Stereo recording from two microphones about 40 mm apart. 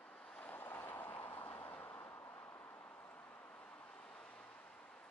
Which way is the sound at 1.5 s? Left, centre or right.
Left.